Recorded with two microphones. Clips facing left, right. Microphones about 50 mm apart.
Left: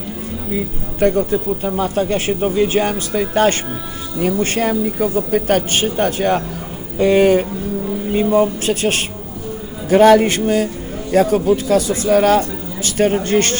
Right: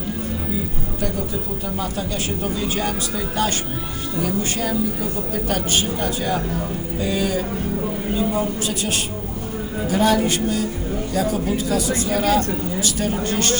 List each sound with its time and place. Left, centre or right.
0.9 s speech: left